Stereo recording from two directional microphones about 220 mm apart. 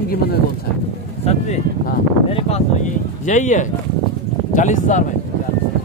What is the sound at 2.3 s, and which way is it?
Speech, 30° left (ahead or behind).